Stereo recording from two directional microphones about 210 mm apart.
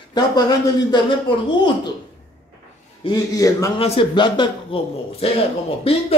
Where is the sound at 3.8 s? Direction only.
25° left (ahead or behind).